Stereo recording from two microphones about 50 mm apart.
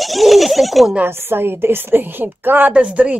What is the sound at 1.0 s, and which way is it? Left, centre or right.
Speech, right.